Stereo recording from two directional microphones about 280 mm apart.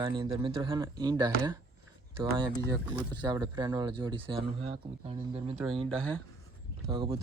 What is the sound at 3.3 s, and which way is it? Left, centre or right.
Speech, centre.